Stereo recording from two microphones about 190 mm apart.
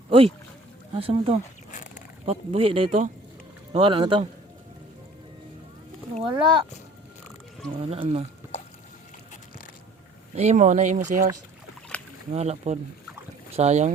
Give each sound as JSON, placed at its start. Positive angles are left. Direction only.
{"t": 0.1, "sound": "speech", "side_deg": -30}
{"t": 1.7, "sound": "a sound", "side_deg": 40}
{"t": 2.2, "sound": "speech", "side_deg": -30}
{"t": 6.1, "sound": "speech", "side_deg": -25}
{"t": 7.8, "sound": "speech", "side_deg": -30}
{"t": 10.3, "sound": "speech", "side_deg": -40}
{"t": 12.3, "sound": "speech", "side_deg": -35}